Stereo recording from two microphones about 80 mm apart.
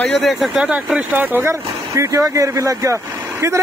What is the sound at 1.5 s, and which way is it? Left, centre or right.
Speech, right.